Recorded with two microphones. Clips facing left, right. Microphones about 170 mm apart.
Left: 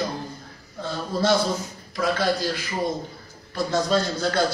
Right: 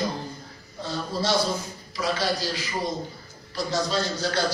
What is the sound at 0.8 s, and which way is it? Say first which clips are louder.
A man's voice: left 3 dB; 55° left (ahead or behind).